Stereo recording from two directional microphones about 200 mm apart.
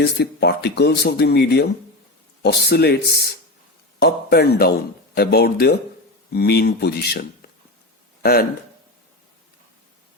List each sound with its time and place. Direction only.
0.0 s speech: 55° left (ahead or behind)